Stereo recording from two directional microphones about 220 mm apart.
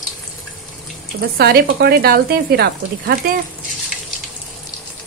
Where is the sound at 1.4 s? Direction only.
45° right (ahead or behind).